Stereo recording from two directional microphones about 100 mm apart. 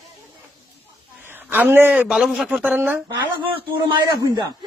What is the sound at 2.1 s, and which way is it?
Speech, 5° right (ahead or behind).